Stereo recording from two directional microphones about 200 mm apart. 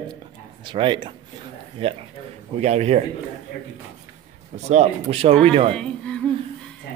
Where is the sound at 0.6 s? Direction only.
25° right (ahead or behind).